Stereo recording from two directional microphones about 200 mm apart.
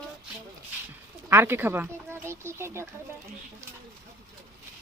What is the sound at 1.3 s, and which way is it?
A child's voice, 10° right (ahead or behind).